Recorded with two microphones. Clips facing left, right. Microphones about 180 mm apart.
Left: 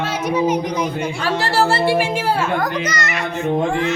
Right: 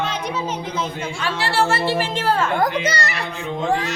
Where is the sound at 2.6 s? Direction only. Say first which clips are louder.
Right 1 dB; 30° right (ahead or behind).